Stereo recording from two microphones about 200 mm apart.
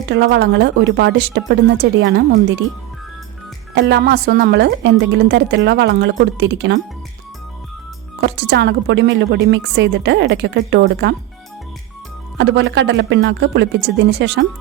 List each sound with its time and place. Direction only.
0.0 s a woman's voice: 60° right (ahead or behind)
3.8 s a woman's voice: 60° right (ahead or behind)
8.2 s a woman's voice: 55° right (ahead or behind)
12.4 s a woman's voice: 60° right (ahead or behind)